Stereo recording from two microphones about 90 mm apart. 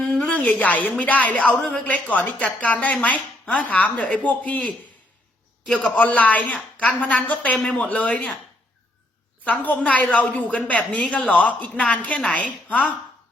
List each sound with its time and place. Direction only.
0.0 s a sound: 10° left (ahead or behind)
0.3 s speech: 20° left (ahead or behind)
9.4 s speech: 15° left (ahead or behind)